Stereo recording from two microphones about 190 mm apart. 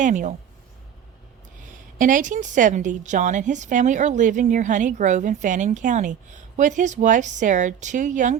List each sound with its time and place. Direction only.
0.0 s a woman's voice: 40° right (ahead or behind)
2.0 s a woman's voice: 45° right (ahead or behind)